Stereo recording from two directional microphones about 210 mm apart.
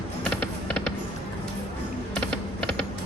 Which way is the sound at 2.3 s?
25° right (ahead or behind).